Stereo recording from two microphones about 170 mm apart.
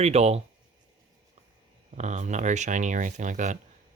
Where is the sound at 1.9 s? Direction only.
45° right (ahead or behind).